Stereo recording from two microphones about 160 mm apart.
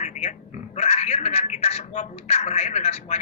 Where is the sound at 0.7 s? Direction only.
40° left (ahead or behind).